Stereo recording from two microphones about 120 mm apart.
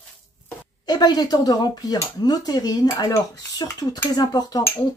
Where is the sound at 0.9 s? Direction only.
35° left (ahead or behind).